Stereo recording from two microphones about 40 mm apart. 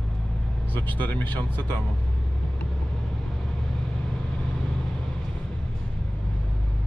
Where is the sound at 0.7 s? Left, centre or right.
Left.